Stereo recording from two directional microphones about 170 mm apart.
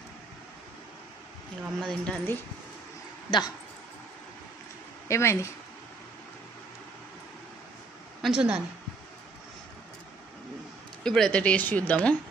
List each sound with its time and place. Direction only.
1.8 s speech: 5° left (ahead or behind)
3.3 s speech: 25° left (ahead or behind)
5.0 s speech: 15° left (ahead or behind)
8.2 s a woman's voice: 5° right (ahead or behind)
11.1 s speech: 5° left (ahead or behind)